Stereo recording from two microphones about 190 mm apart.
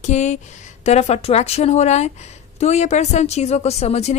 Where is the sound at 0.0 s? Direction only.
40° left (ahead or behind).